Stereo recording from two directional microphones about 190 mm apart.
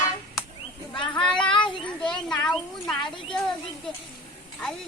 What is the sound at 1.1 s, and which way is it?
Child singing, 5° left (ahead or behind).